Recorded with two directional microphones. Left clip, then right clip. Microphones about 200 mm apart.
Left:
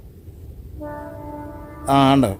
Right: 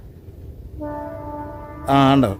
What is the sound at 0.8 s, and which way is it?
Music, 35° left (ahead or behind).